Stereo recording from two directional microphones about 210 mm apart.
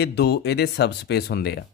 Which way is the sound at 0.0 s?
50° left (ahead or behind).